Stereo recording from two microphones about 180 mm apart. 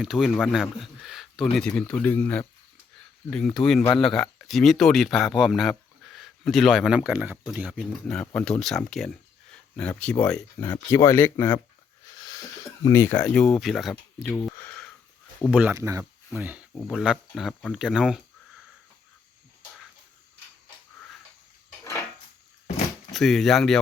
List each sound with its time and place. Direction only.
0.0 s speech: centre (ahead or behind)
12.1 s a sound: 20° left (ahead or behind)
15.4 s speech: 5° right (ahead or behind)
23.1 s speech: centre (ahead or behind)